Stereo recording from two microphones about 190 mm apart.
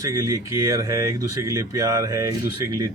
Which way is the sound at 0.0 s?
15° right (ahead or behind).